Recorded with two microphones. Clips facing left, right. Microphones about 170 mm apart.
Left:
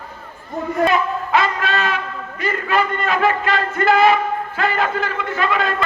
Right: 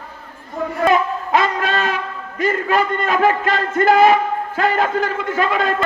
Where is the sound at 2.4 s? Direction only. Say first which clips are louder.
Right 3 dB; 45° right (ahead or behind).